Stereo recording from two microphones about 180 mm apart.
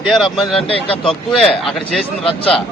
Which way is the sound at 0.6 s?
30° left (ahead or behind).